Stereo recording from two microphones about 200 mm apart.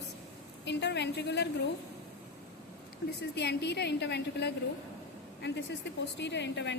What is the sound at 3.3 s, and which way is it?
A woman's voice, 55° left (ahead or behind).